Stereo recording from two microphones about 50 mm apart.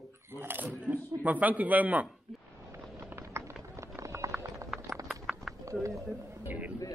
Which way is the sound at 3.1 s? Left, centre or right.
Right.